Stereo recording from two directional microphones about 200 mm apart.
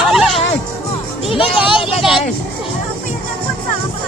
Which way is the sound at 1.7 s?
25° left (ahead or behind).